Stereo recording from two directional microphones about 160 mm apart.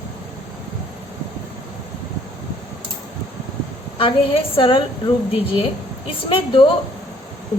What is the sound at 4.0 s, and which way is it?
A woman's voice, 35° left (ahead or behind).